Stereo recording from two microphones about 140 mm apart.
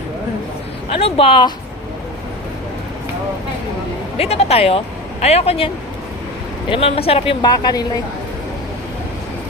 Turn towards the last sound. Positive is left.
turn(degrees=30)  # may be behind; listen again after turning